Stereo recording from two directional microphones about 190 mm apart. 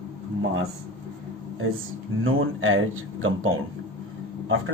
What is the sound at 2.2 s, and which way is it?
Speech, 90° right.